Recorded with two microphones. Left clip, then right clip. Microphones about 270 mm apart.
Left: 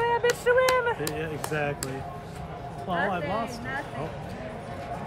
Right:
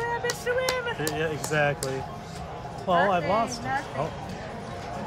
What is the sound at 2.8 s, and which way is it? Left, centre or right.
Speech, right.